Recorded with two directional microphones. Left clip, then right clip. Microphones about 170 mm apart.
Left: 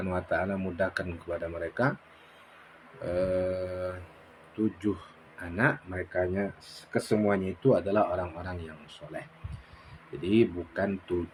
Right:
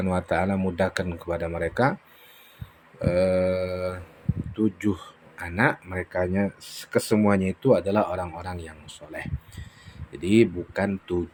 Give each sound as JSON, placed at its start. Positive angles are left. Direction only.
{"t": 0.0, "sound": "a man's voice", "side_deg": -45}
{"t": 3.0, "sound": "a man's voice", "side_deg": -50}